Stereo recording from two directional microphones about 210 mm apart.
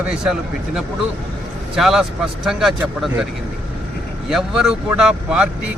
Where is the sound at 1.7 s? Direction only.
Centre (ahead or behind).